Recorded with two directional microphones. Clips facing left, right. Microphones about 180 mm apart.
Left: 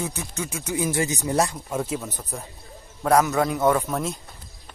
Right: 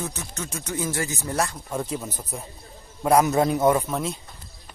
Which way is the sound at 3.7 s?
Centre (ahead or behind).